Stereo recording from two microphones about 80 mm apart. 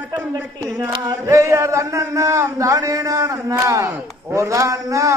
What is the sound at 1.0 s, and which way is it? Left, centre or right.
Speech, right.